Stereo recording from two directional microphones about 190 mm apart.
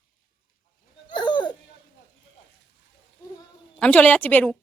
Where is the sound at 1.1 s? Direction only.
25° left (ahead or behind).